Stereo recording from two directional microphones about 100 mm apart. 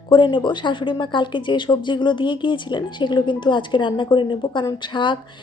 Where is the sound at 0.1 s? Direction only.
55° left (ahead or behind).